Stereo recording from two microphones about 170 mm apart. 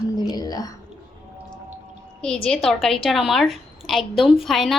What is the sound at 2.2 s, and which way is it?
A woman's voice, 5° left (ahead or behind).